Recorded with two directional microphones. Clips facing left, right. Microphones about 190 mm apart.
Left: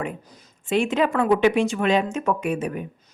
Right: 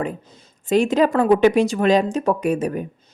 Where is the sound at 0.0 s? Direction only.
30° right (ahead or behind).